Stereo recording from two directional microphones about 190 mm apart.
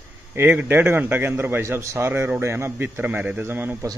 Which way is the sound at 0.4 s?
10° right (ahead or behind).